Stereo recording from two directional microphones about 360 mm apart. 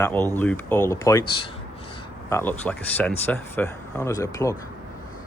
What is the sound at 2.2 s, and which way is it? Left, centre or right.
Speech, centre.